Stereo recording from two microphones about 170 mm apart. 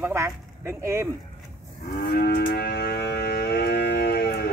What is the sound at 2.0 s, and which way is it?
Moo, 65° left (ahead or behind).